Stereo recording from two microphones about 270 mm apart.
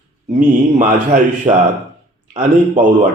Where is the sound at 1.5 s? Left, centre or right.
Centre.